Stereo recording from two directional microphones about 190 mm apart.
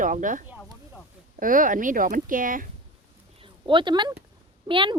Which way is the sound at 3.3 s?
25° right (ahead or behind).